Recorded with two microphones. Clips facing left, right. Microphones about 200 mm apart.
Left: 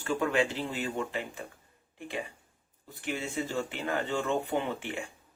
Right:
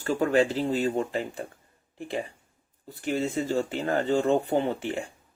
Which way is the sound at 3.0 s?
40° right (ahead or behind).